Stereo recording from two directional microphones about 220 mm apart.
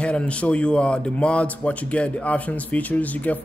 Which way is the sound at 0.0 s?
5° left (ahead or behind).